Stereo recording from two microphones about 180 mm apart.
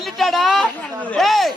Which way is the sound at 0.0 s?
Centre (ahead or behind).